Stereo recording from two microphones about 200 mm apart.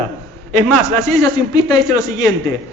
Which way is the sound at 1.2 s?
20° left (ahead or behind).